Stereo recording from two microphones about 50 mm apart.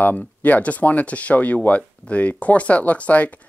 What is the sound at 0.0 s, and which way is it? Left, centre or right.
Speech, left.